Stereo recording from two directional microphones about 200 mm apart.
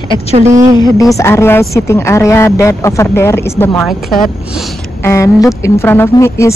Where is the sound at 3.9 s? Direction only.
Centre (ahead or behind).